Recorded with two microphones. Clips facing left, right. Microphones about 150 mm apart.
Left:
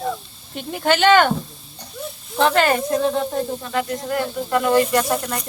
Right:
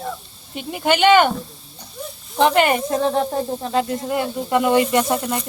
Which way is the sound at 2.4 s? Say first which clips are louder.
Right 1 dB; 15° right (ahead or behind).